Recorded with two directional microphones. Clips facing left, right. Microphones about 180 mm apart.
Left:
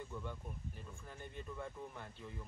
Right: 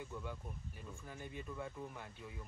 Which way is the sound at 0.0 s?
5° right (ahead or behind).